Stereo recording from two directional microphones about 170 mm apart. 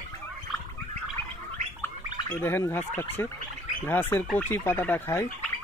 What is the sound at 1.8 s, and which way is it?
Gargling, 10° left (ahead or behind).